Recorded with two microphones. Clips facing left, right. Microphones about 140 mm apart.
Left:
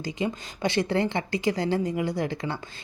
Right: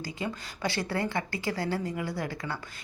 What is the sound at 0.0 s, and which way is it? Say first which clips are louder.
A woman's voice: left 5 dB; 20° left (ahead or behind).